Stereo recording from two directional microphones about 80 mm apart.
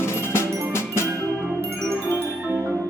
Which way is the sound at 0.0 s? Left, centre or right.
Left.